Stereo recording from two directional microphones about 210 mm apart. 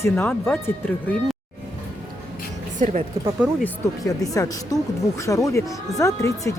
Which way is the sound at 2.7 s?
35° right (ahead or behind).